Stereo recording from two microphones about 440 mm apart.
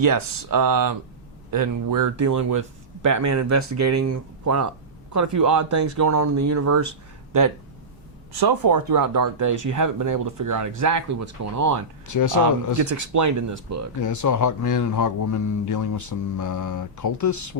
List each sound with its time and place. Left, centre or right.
0.0 s speech: right
8.4 s speech: right
12.0 s speech: left
12.8 s speech: right
14.0 s speech: left